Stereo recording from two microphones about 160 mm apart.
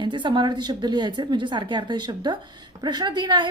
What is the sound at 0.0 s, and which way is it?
Speech, 30° right (ahead or behind).